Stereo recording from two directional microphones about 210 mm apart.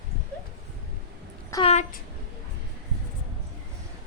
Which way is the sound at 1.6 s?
35° left (ahead or behind).